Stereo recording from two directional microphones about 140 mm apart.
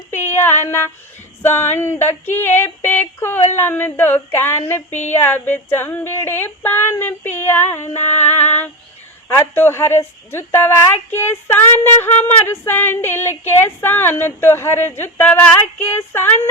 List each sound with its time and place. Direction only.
0.6 s a woman's voice: 15° left (ahead or behind)
4.9 s speech: 55° left (ahead or behind)
5.1 s a woman's voice: 15° left (ahead or behind)